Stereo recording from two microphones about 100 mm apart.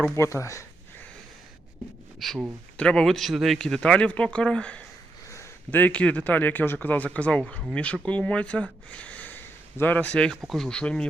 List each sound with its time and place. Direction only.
0.2 s speech: 30° left (ahead or behind)
2.1 s a man's voice: centre (ahead or behind)